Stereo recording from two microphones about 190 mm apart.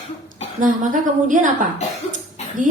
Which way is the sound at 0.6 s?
40° right (ahead or behind).